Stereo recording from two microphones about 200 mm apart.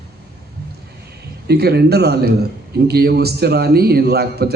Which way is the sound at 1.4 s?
55° right (ahead or behind).